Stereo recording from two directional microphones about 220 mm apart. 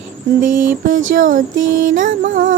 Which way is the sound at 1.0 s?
60° right (ahead or behind).